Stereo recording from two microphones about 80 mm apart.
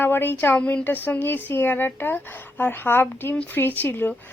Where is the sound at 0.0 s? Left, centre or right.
Left.